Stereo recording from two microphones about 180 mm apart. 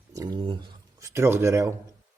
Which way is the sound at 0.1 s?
20° right (ahead or behind).